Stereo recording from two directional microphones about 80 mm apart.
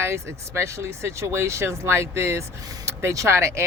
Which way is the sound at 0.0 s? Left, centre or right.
Right.